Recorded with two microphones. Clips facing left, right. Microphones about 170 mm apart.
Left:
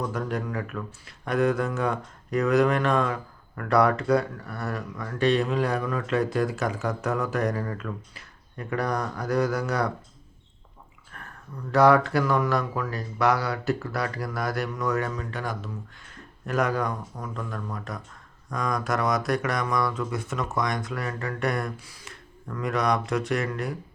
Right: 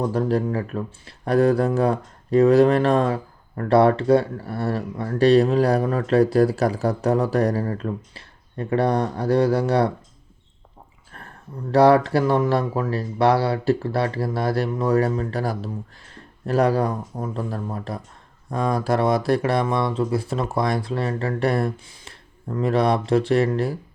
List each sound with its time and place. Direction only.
0.0 s speech: 30° right (ahead or behind)
11.1 s a sound: 35° right (ahead or behind)
11.7 s speech: 35° right (ahead or behind)